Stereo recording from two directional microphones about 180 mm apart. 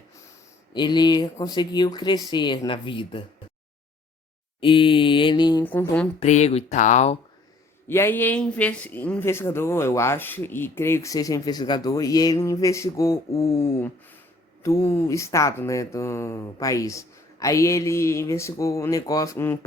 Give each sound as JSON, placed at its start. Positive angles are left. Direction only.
{"t": 0.7, "sound": "speech", "side_deg": 25}
{"t": 4.6, "sound": "speech", "side_deg": 30}
{"t": 5.6, "sound": "speech", "side_deg": 10}
{"t": 6.1, "sound": "speech", "side_deg": 40}
{"t": 7.9, "sound": "speech", "side_deg": 15}